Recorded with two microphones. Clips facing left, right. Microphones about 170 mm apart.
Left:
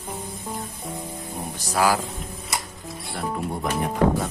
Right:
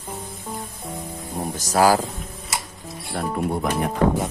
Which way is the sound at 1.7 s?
40° right (ahead or behind).